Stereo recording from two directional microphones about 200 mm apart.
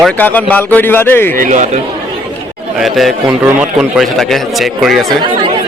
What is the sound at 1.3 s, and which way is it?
Speech, 40° right (ahead or behind).